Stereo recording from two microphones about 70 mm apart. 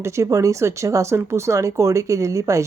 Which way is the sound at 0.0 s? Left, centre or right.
Right.